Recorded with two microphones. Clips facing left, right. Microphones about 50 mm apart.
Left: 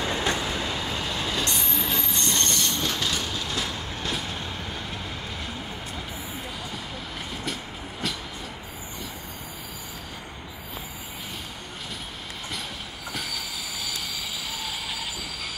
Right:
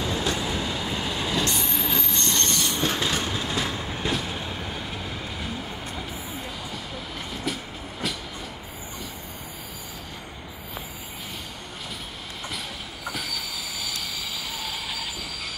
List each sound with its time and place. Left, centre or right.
0.0 s train: left
1.2 s train: centre
2.8 s train: right
3.5 s train: centre
4.1 s vehicle: centre
8.0 s train: centre
13.1 s train: centre